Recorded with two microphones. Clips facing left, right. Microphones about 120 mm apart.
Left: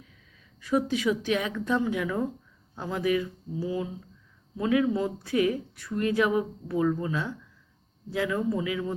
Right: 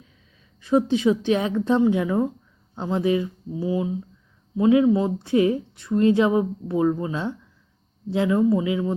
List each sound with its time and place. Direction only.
0.6 s speech: 30° right (ahead or behind)